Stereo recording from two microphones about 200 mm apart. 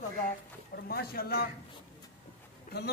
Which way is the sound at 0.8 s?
50° left (ahead or behind).